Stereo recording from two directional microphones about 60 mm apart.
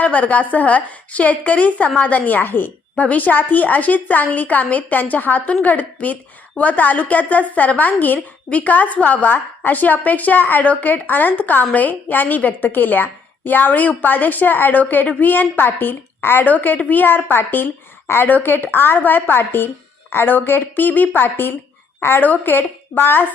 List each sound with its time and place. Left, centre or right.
0.0 s a woman's voice: left